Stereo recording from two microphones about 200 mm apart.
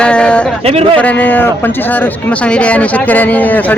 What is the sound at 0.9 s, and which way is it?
Speech, 5° left (ahead or behind).